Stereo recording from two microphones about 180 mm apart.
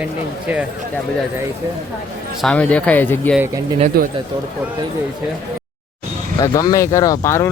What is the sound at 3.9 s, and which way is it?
Speech, 55° right (ahead or behind).